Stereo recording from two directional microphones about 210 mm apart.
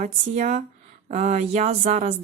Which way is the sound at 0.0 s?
30° right (ahead or behind).